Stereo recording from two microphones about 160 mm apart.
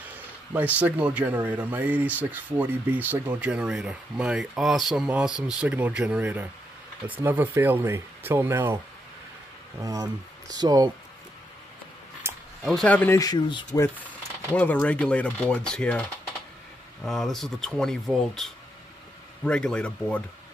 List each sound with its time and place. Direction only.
0.0 s speech: 10° right (ahead or behind)
9.8 s speech: 20° right (ahead or behind)
12.2 s a sound: 15° right (ahead or behind)
12.6 s speech: 5° left (ahead or behind)
13.2 s speech: 30° left (ahead or behind)
14.5 s speech: 10° left (ahead or behind)
17.0 s speech: centre (ahead or behind)